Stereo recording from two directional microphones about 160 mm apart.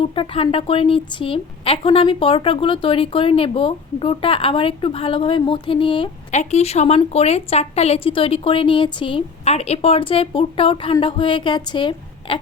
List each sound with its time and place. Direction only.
0.0 s a woman's voice: 35° left (ahead or behind)
6.3 s a woman's voice: 45° left (ahead or behind); by 12.4 s 30° left (ahead or behind)